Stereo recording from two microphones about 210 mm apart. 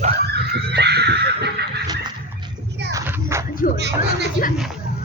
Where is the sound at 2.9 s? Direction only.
10° right (ahead or behind).